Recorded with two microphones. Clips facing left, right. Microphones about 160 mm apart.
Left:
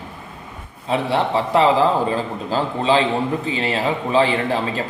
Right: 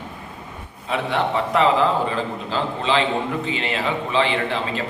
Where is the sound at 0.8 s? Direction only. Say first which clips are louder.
Left 3 dB; 35° left (ahead or behind).